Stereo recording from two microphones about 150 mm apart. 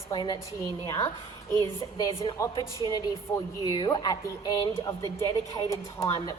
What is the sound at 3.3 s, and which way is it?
A woman's voice, 20° left (ahead or behind).